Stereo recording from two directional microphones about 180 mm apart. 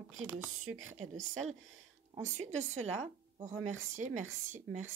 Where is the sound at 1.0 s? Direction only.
40° right (ahead or behind).